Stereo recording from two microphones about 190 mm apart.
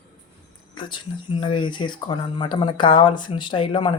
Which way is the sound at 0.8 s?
25° left (ahead or behind).